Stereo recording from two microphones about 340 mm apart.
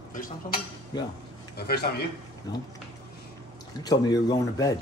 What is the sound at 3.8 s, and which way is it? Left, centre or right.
Speech, centre.